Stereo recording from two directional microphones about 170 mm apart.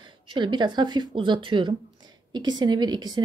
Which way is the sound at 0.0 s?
25° right (ahead or behind).